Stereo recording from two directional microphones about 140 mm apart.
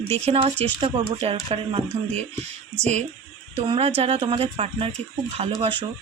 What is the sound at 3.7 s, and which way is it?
Speech, 45° right (ahead or behind).